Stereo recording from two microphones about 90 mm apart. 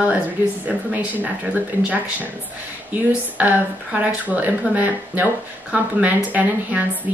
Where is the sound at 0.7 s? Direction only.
20° right (ahead or behind).